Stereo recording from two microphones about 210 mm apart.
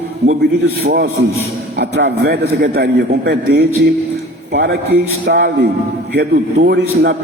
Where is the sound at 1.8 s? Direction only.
55° right (ahead or behind).